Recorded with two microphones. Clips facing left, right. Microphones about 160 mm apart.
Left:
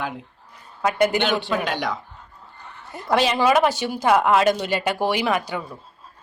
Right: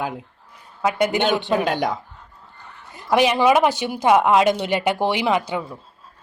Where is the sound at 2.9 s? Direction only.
15° right (ahead or behind).